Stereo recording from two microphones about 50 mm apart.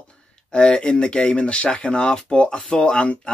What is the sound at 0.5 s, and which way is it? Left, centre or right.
Speech, left.